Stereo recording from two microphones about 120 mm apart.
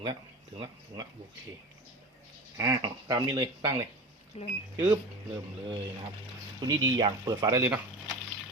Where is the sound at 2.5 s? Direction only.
30° right (ahead or behind).